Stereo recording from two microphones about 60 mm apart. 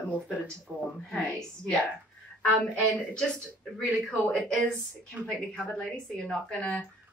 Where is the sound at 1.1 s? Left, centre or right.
Centre.